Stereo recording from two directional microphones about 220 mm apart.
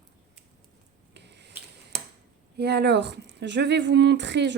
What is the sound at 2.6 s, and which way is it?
A woman's voice, 50° right (ahead or behind).